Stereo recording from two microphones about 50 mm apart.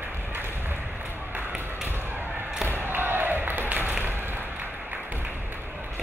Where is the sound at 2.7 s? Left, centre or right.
Right.